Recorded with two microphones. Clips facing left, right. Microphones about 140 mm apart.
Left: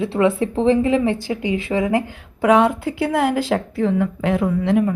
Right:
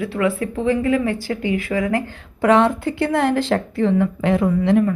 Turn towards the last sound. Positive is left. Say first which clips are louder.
# right 2 dB
turn(degrees=0)  # may be behind; listen again after turning